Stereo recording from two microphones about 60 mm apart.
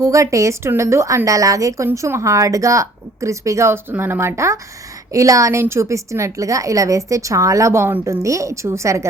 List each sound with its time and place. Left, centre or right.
0.0 s a woman's voice: right
2.0 s a woman's voice: right
4.4 s a woman's voice: right
5.1 s a woman's voice: right